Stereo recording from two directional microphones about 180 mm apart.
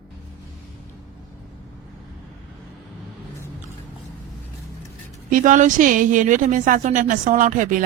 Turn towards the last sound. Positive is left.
turn(degrees=-45)  # may be behind; listen again after turning